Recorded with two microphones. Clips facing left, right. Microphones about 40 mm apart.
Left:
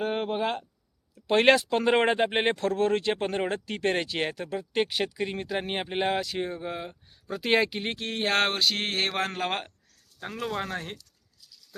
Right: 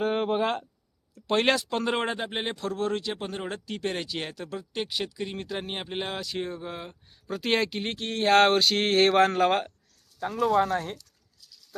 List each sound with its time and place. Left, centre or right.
0.0 s speech: centre
1.1 s speech: centre
4.7 s speech: left; by 9.6 s centre
10.5 s speech: centre